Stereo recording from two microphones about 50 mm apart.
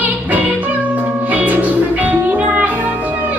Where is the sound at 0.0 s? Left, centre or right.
Right.